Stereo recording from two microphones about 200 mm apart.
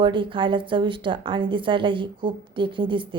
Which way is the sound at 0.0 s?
25° right (ahead or behind).